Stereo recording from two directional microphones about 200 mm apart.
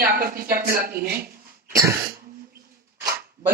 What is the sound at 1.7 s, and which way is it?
Cough, 15° right (ahead or behind).